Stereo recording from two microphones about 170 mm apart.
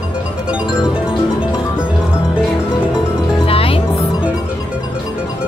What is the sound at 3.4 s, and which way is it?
Music, 35° left (ahead or behind).